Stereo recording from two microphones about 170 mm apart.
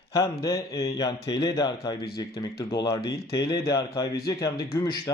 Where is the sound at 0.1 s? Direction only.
20° left (ahead or behind).